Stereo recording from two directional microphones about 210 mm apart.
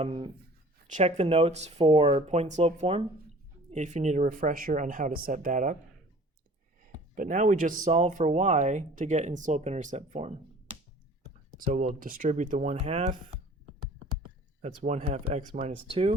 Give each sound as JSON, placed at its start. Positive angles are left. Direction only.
{"t": 0.0, "sound": "speech", "side_deg": -25}
{"t": 6.8, "sound": "speech", "side_deg": -40}
{"t": 11.5, "sound": "speech", "side_deg": -40}
{"t": 14.6, "sound": "speech", "side_deg": -30}